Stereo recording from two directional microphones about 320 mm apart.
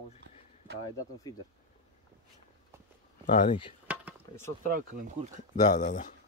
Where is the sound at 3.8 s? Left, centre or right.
Centre.